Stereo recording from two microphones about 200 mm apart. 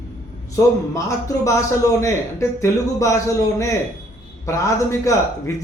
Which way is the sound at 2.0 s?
15° left (ahead or behind).